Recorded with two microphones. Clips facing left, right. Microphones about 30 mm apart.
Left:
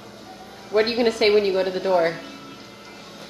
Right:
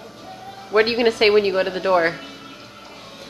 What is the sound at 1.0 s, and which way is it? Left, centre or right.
A woman's voice, right.